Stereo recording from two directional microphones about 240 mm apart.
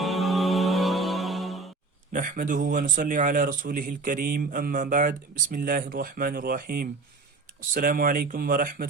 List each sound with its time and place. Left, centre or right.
0.0 s music: centre
2.1 s speech: right